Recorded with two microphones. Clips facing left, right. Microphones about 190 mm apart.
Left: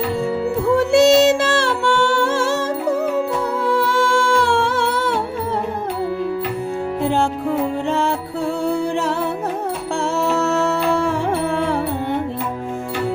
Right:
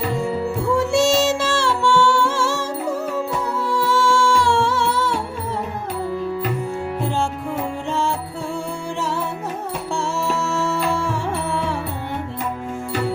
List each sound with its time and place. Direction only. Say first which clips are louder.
0.8 s music: left 6 dB; 60° left (ahead or behind)
3.7 s music: left 1 dB; 55° left (ahead or behind)
7.9 s music: even; 60° left (ahead or behind)
9.9 s music: left 4 dB; 60° left (ahead or behind)